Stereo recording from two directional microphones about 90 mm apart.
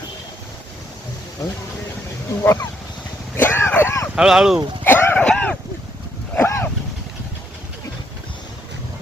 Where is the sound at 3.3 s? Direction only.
25° left (ahead or behind).